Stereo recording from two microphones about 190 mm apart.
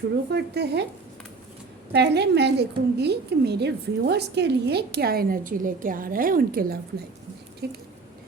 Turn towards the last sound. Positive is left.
turn(degrees=-60)  # may be behind; listen again after turning